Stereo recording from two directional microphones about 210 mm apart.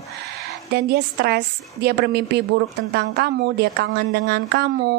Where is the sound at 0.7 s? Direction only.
50° right (ahead or behind).